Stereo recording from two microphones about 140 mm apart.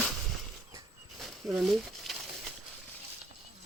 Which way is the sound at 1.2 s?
5° right (ahead or behind).